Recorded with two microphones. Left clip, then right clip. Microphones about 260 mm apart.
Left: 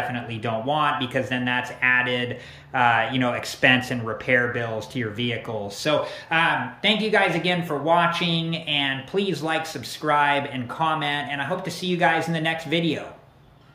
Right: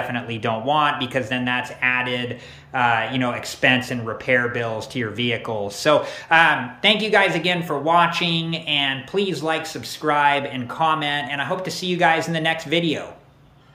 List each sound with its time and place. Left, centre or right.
0.0 s speech: centre